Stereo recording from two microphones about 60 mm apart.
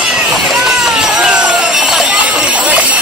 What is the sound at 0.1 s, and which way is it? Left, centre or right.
Run, centre.